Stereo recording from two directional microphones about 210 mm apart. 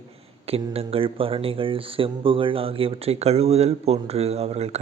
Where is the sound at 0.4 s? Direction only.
30° right (ahead or behind).